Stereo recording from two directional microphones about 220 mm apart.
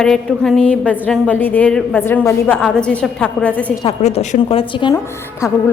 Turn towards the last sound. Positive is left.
turn(degrees=15)  # may be behind; listen again after turning